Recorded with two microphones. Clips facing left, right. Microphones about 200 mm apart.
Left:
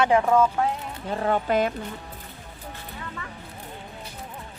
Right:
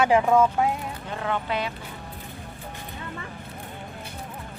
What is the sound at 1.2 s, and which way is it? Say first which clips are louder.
Speech: left 6 dB; 40° left (ahead or behind).